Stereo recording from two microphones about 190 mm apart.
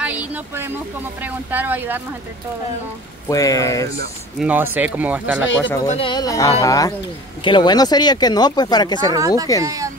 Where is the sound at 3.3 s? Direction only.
20° left (ahead or behind).